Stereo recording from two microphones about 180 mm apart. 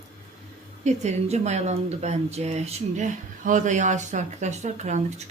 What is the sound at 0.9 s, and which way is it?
Speech, 40° right (ahead or behind).